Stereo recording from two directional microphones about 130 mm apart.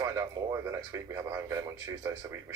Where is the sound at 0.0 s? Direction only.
25° right (ahead or behind).